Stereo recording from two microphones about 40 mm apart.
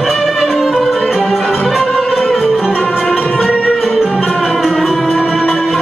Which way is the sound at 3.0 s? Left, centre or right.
Left.